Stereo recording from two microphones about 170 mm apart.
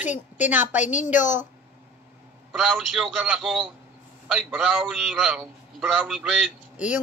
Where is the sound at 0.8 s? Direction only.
45° left (ahead or behind).